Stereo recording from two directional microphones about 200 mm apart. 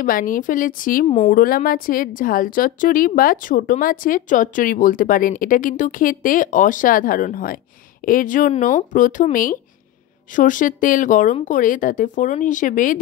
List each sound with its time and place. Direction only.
0.0 s a woman's voice: 45° left (ahead or behind)
1.0 s speech: 30° left (ahead or behind)
1.3 s a woman's voice: 45° left (ahead or behind)